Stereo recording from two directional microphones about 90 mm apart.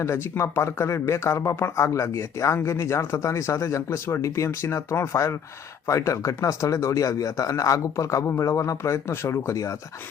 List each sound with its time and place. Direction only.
0.0 s speech: 30° left (ahead or behind)